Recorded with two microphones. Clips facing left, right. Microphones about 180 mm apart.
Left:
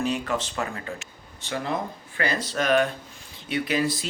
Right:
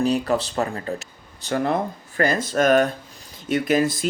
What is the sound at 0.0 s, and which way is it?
Speech, 35° right (ahead or behind).